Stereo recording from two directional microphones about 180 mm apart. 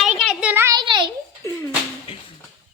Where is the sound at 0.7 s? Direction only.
25° right (ahead or behind).